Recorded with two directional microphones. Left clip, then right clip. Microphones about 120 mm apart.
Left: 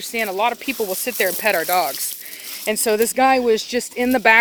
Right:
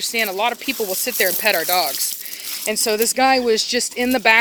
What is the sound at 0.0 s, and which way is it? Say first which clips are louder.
Speech: even; 5° left (ahead or behind).